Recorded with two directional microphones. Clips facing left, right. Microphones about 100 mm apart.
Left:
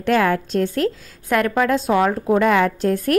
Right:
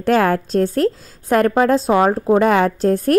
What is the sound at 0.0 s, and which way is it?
A woman's voice, 40° right (ahead or behind).